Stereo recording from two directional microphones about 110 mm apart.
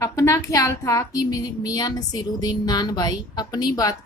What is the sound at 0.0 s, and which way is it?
A woman's voice, 30° left (ahead or behind).